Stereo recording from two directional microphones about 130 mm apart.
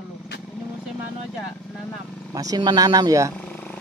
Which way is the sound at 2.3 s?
30° right (ahead or behind).